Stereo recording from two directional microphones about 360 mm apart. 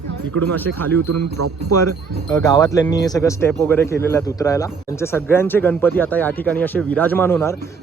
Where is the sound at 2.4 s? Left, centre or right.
Centre.